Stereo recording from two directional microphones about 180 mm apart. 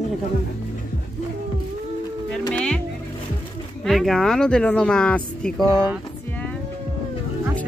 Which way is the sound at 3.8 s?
Centre (ahead or behind).